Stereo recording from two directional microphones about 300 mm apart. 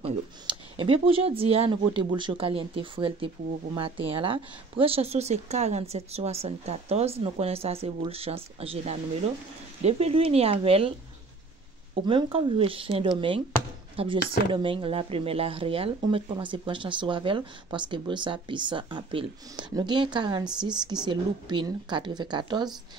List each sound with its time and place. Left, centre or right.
0.0 s speech: centre
11.9 s speech: centre